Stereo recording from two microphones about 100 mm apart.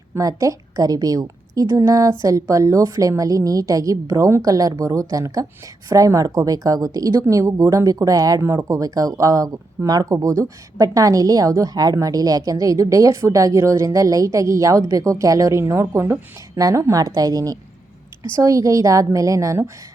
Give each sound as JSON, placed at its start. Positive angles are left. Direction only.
{"t": 0.1, "sound": "a woman's voice", "side_deg": -35}